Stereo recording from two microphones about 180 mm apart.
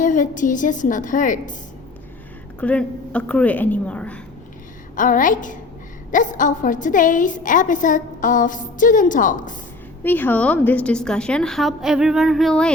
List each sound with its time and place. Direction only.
0.0 s a woman's voice: 45° left (ahead or behind)
2.6 s speech: 5° left (ahead or behind)
4.9 s a woman's voice: 45° left (ahead or behind)
10.0 s a woman's voice: 10° left (ahead or behind)